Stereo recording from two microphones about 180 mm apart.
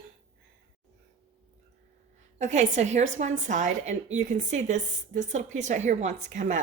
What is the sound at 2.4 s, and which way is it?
A woman's voice, 40° right (ahead or behind).